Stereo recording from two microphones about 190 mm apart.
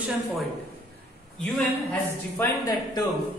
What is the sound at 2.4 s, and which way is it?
Speech, 15° left (ahead or behind).